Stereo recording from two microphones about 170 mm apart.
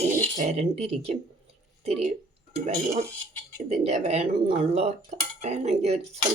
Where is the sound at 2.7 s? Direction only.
40° right (ahead or behind).